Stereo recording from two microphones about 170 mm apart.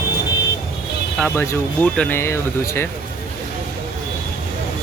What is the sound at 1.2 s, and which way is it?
Speech, 10° left (ahead or behind).